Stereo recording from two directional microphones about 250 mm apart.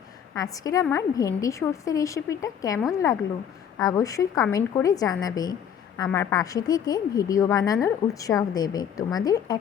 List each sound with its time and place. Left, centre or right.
0.5 s a woman's voice: centre